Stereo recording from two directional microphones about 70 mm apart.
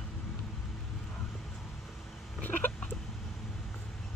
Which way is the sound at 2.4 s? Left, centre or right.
Left.